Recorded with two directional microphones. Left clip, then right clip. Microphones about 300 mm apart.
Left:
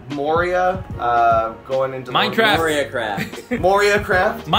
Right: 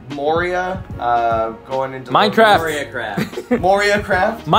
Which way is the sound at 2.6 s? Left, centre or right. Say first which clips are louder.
Left 2 dB; left.